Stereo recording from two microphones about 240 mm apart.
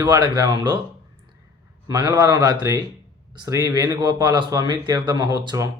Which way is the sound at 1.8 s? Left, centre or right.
Centre.